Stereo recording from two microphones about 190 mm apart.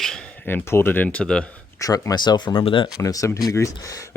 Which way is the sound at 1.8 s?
20° left (ahead or behind).